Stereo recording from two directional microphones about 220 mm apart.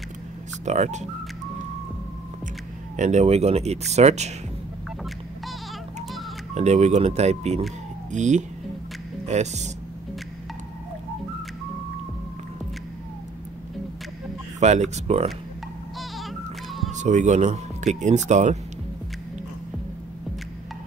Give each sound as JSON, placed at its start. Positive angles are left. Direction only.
{"t": 0.7, "sound": "speech", "side_deg": -30}
{"t": 3.0, "sound": "speech", "side_deg": -30}
{"t": 6.5, "sound": "speech", "side_deg": -30}
{"t": 14.6, "sound": "speech", "side_deg": -30}
{"t": 16.9, "sound": "speech", "side_deg": -35}